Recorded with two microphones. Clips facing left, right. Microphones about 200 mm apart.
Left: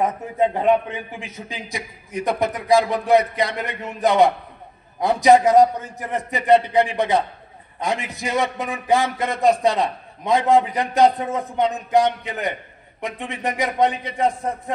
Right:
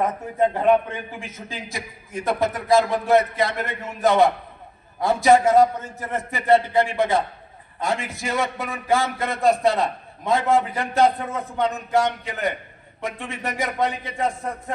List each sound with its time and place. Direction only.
0.8 s a man's voice: 20° left (ahead or behind)